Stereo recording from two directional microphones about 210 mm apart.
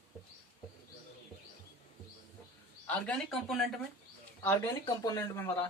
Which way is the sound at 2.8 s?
5° left (ahead or behind).